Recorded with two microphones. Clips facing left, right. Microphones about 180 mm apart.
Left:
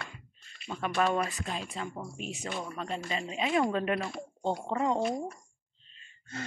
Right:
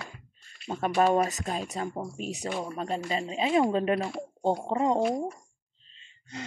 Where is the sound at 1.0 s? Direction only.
40° right (ahead or behind).